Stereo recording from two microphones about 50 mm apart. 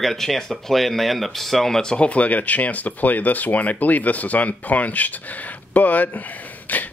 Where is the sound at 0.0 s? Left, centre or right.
Centre.